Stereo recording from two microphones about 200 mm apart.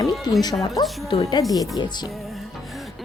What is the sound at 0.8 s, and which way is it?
Speech, 20° left (ahead or behind).